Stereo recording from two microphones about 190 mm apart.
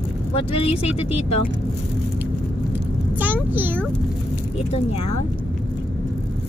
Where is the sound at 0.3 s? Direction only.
30° left (ahead or behind).